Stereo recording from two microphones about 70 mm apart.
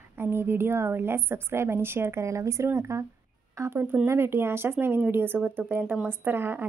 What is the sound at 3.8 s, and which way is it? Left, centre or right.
Speech, right.